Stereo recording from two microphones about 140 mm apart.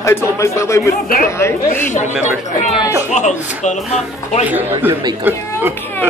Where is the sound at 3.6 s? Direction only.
60° left (ahead or behind).